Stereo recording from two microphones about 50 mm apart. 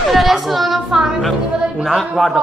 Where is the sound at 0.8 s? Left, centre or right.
Centre.